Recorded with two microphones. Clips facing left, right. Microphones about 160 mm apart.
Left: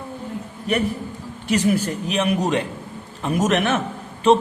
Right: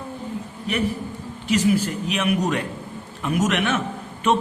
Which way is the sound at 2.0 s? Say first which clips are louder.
Left 2 dB; 35° left (ahead or behind).